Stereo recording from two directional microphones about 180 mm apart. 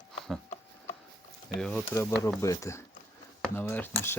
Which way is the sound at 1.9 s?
15° left (ahead or behind).